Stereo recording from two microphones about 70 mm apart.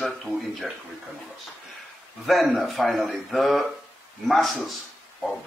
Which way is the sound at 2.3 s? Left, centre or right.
Centre.